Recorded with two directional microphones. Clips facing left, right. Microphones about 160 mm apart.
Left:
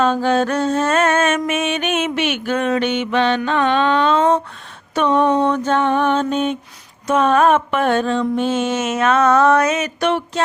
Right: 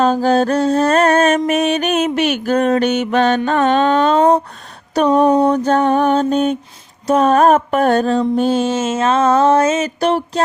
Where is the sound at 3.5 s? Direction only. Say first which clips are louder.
Right 3 dB; 45° right (ahead or behind).